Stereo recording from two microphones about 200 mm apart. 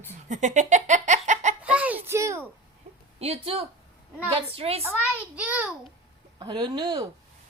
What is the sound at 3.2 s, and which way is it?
A woman's voice, 30° right (ahead or behind).